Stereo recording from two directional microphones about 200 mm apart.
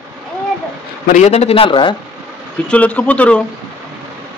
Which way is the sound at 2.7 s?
5° left (ahead or behind).